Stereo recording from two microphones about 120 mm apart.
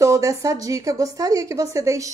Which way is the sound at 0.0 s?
25° right (ahead or behind).